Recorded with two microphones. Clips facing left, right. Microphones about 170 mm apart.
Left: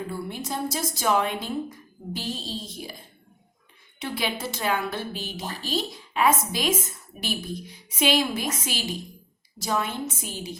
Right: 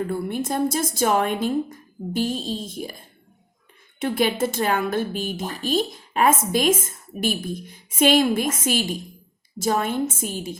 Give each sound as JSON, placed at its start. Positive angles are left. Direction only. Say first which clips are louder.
{"t": 0.1, "sound": "a woman's voice", "louder": "right 6 dB", "side_deg": -55}
{"t": 4.0, "sound": "a woman's voice", "louder": "right 8 dB", "side_deg": -50}